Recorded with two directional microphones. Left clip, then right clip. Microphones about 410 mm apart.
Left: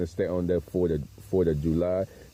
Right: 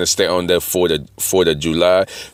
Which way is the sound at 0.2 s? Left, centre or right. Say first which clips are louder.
Right 9 dB; centre.